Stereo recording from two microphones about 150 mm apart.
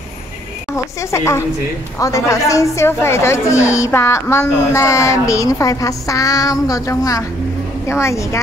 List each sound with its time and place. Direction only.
1.1 s a woman's voice: 20° left (ahead or behind)